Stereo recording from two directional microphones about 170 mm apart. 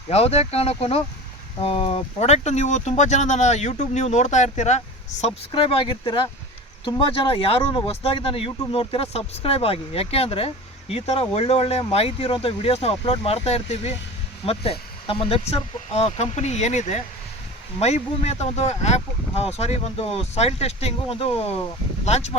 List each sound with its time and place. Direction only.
0.1 s speech: 40° left (ahead or behind)
5.5 s speech: 30° left (ahead or behind)